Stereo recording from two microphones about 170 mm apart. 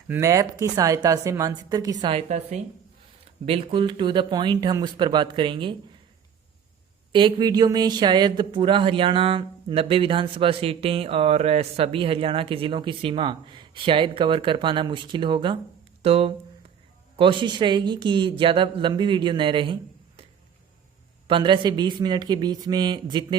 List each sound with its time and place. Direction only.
0.1 s speech: 15° right (ahead or behind)
2.2 s a woman's voice: 40° right (ahead or behind)
7.1 s speech: 30° right (ahead or behind)
21.2 s speech: 30° right (ahead or behind)